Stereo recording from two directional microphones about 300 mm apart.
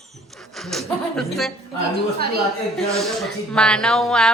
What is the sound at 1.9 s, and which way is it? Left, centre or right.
Speech, right.